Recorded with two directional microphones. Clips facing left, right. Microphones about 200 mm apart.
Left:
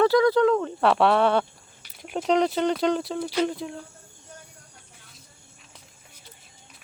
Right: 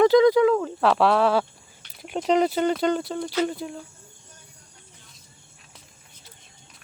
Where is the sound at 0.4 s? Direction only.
Centre (ahead or behind).